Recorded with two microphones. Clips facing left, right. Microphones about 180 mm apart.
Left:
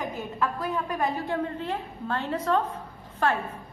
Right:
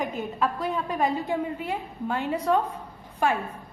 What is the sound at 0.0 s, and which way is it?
A woman's voice, 20° right (ahead or behind).